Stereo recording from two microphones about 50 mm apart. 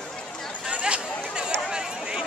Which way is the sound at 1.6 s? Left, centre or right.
Centre.